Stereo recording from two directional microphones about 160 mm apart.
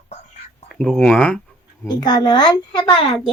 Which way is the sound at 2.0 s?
25° left (ahead or behind).